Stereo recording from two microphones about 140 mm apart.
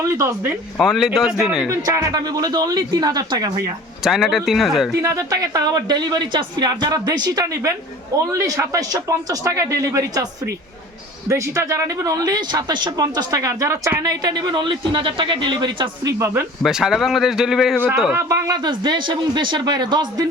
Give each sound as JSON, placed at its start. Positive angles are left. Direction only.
{"t": 0.0, "sound": "a woman's voice", "side_deg": -20}
{"t": 0.8, "sound": "a man's voice", "side_deg": 0}
{"t": 1.8, "sound": "a woman's voice", "side_deg": -25}
{"t": 4.0, "sound": "a man's voice", "side_deg": 0}
{"t": 4.9, "sound": "a woman's voice", "side_deg": -25}
{"t": 16.6, "sound": "a man's voice", "side_deg": -5}
{"t": 18.1, "sound": "speech", "side_deg": -25}